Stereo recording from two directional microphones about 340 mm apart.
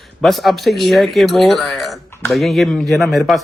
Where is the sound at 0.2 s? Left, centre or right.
Centre.